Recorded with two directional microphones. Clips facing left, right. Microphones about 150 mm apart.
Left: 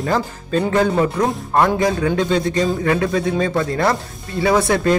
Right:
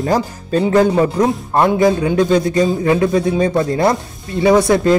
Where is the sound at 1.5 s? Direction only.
20° right (ahead or behind).